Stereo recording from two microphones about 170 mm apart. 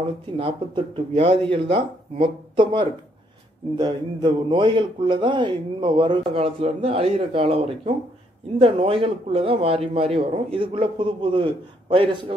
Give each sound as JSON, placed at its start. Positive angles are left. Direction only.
{"t": 0.4, "sound": "a man's voice", "side_deg": -30}